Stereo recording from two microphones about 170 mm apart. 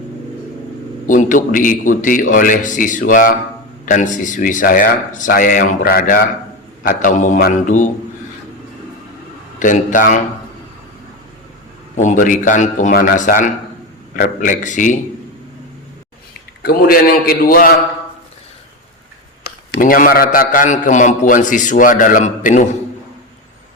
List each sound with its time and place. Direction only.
1.0 s a man's voice: 50° left (ahead or behind)
9.6 s a man's voice: 50° left (ahead or behind)
11.9 s a man's voice: 50° left (ahead or behind)
16.6 s a man's voice: 65° left (ahead or behind)
19.8 s a man's voice: 55° left (ahead or behind)